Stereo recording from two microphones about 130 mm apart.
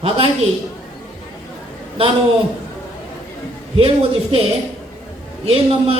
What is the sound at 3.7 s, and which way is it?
Speech, 45° right (ahead or behind).